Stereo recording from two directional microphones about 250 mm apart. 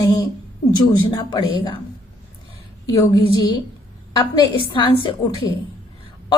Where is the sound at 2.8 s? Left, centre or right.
Centre.